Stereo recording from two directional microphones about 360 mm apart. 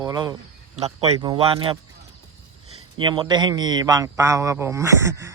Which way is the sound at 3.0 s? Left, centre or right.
Centre.